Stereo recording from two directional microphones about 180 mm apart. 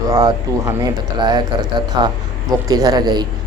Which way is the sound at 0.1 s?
25° right (ahead or behind).